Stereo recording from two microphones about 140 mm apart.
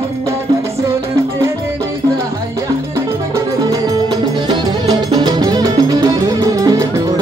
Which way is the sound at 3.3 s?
25° right (ahead or behind).